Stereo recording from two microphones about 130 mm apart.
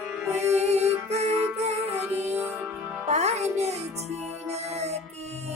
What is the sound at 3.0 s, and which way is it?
Music, 55° right (ahead or behind).